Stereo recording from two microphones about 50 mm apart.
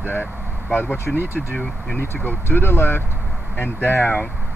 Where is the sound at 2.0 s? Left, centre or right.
Left.